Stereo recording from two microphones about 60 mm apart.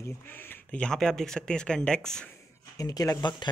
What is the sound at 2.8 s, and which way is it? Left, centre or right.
Speech, left.